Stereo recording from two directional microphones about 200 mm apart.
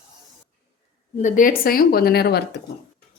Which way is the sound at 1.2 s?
40° left (ahead or behind).